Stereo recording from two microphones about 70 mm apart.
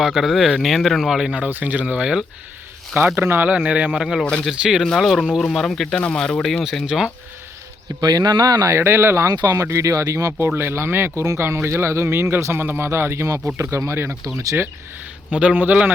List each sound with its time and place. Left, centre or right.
0.0 s speech: centre
1.5 s speech: right
3.2 s speech: right
3.7 s speech: centre
3.9 s speech: centre
8.0 s speech: right
8.8 s speech: right
9.2 s speech: right
9.5 s speech: right
10.3 s speech: right
15.3 s speech: centre